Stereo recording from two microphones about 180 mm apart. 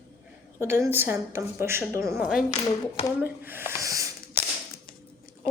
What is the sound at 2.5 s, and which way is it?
Speech, 35° left (ahead or behind).